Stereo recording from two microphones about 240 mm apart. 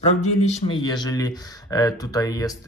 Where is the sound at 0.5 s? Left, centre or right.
Centre.